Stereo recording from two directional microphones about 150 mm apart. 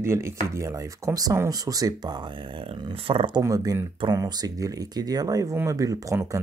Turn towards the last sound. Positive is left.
turn(degrees=-20)  # may be behind; listen again after turning